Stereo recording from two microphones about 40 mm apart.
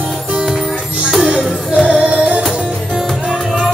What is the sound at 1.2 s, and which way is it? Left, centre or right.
Music, centre.